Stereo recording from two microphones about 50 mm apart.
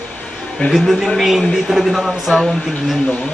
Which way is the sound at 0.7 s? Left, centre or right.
Centre.